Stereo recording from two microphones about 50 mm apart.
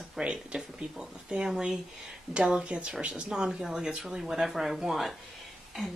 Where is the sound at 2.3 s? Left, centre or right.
Centre.